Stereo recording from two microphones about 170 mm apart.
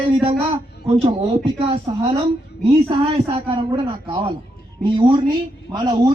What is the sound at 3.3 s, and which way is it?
A man's voice, 30° right (ahead or behind).